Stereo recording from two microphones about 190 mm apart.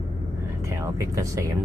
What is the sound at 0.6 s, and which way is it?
Speech, 15° right (ahead or behind).